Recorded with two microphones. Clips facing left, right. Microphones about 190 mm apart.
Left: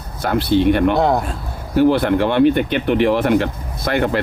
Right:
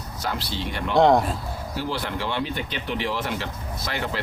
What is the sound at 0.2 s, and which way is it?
Speech, 55° left (ahead or behind).